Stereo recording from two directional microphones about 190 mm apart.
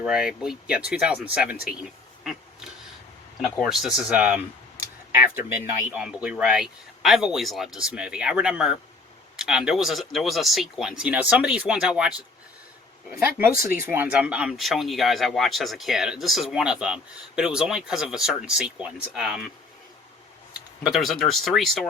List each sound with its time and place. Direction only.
0.0 s speech: 5° right (ahead or behind)
1.6 s a sound: 5° right (ahead or behind)
3.6 s speech: centre (ahead or behind)
5.5 s speech: 5° right (ahead or behind)
13.8 s speech: 10° right (ahead or behind)
20.8 s speech: centre (ahead or behind)